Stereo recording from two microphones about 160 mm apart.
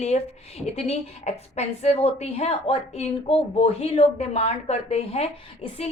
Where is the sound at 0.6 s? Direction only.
45° left (ahead or behind).